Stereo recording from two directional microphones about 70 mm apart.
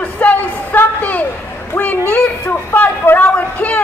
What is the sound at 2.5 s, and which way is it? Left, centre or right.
A woman's voice, left.